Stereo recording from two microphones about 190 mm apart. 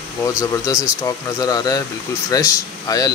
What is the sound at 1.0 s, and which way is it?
Speech, 20° left (ahead or behind).